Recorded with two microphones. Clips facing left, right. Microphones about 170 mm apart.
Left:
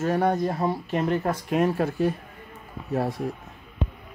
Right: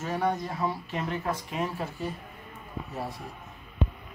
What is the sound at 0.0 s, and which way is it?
Speech, 55° left (ahead or behind).